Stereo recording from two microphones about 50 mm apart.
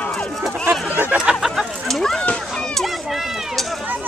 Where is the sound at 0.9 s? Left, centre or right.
Right.